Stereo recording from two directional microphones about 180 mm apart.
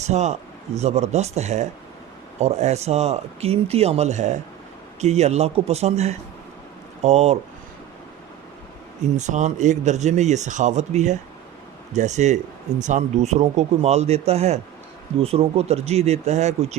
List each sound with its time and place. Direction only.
0.0 s speech: 40° right (ahead or behind)
9.0 s speech: 40° right (ahead or behind)